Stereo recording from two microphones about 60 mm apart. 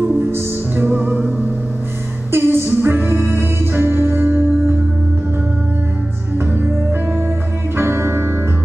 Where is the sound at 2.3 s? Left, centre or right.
Right.